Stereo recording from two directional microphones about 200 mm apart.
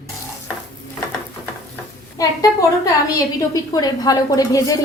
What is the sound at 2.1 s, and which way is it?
A woman's voice, 15° left (ahead or behind).